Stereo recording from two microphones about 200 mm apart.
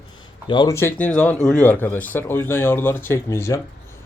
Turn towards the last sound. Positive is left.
turn(degrees=15)  # may be behind; listen again after turning